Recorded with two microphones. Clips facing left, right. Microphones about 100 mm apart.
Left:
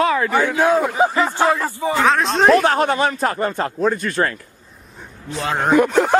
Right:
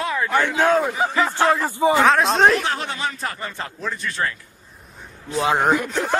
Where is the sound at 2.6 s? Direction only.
50° left (ahead or behind).